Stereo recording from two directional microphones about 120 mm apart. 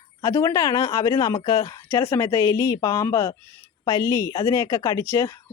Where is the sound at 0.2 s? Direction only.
20° left (ahead or behind).